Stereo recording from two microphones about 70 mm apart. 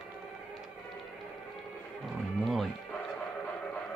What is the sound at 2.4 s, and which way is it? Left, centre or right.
Music, centre.